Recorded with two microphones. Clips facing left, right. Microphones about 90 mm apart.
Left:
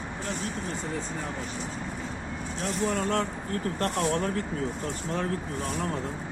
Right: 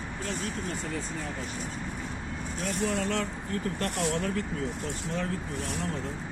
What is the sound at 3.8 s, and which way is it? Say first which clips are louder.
Speech: left 4 dB; 45° left (ahead or behind).